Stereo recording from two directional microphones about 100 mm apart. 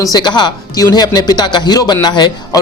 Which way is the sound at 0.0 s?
45° left (ahead or behind).